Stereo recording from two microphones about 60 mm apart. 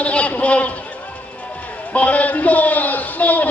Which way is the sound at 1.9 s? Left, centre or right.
Left.